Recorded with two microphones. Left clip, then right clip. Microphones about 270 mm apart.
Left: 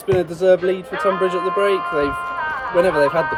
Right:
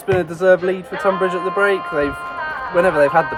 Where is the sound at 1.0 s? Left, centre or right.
Right.